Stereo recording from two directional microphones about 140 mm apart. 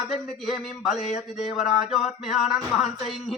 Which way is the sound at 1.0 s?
55° left (ahead or behind).